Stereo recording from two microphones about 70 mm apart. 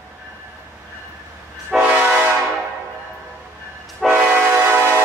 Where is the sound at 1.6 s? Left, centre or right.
Centre.